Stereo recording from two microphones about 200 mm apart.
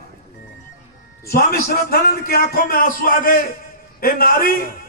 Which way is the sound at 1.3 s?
50° left (ahead or behind).